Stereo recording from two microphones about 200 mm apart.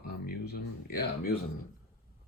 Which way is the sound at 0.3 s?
50° left (ahead or behind).